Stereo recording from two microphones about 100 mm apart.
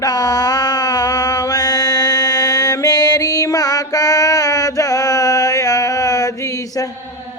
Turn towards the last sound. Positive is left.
turn(degrees=35)  # may be behind; listen again after turning